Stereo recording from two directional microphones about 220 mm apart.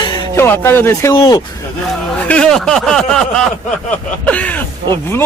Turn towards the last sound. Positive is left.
turn(degrees=10)  # may be behind; listen again after turning